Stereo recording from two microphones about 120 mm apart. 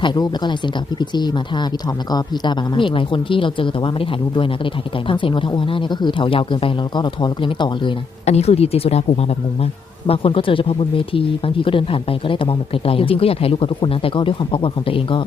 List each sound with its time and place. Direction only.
0.0 s speech: 40° left (ahead or behind)
8.2 s speech: 65° left (ahead or behind)
10.1 s speech: 50° left (ahead or behind)